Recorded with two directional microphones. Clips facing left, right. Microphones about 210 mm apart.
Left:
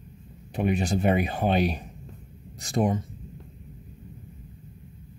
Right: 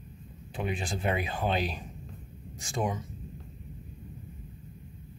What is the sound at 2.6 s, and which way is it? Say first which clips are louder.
Speech: left 7 dB; 35° left (ahead or behind).